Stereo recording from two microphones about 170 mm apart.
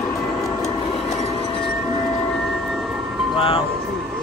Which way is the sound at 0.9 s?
40° left (ahead or behind).